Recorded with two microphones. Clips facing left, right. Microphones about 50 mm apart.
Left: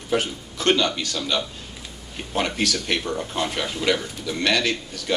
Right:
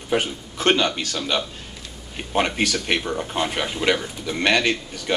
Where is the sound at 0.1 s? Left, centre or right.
Right.